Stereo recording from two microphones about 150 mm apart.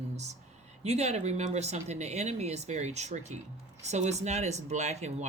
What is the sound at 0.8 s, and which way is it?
Speech, 45° right (ahead or behind).